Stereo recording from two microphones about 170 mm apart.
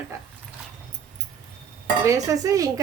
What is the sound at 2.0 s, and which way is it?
Speech, 20° right (ahead or behind).